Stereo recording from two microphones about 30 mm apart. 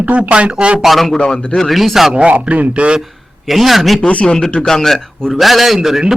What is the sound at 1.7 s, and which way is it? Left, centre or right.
Speech, centre.